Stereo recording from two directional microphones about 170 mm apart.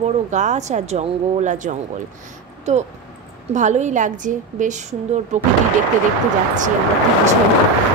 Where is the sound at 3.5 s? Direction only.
45° right (ahead or behind).